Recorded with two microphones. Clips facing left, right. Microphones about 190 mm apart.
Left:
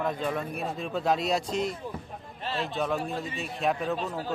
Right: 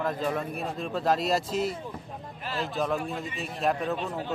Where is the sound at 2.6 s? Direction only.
Centre (ahead or behind).